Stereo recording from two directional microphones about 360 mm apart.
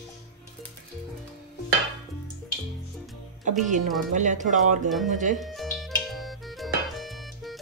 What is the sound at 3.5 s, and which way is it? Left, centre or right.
Speech, centre.